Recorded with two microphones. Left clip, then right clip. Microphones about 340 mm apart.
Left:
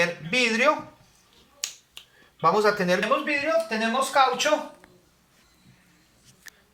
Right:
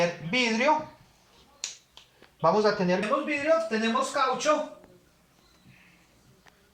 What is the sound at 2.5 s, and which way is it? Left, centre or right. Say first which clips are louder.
Speech: left 3 dB; left.